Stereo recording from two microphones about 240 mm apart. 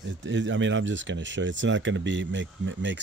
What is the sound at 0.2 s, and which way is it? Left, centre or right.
Speech, right.